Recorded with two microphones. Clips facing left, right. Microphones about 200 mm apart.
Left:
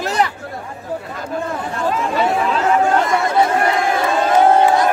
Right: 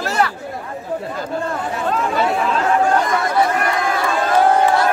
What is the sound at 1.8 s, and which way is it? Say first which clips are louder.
Speech: left 1 dB; 5° left (ahead or behind).